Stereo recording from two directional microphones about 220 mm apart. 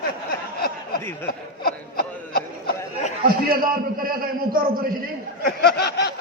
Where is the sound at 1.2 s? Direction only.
45° left (ahead or behind).